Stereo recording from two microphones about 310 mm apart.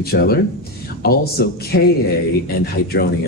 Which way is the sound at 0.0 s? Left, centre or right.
Left.